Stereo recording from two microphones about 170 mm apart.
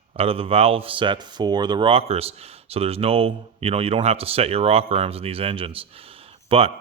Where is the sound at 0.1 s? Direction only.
35° right (ahead or behind).